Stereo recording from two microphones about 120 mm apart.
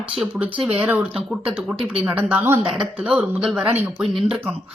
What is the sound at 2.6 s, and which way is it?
Speech, 5° right (ahead or behind).